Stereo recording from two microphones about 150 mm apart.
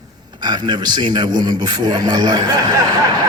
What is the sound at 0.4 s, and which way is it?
A man's voice, 30° right (ahead or behind).